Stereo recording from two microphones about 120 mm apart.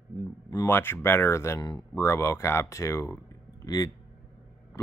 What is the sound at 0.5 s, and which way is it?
Speech, 20° left (ahead or behind).